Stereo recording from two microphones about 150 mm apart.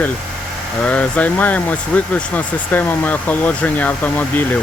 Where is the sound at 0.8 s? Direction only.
10° left (ahead or behind).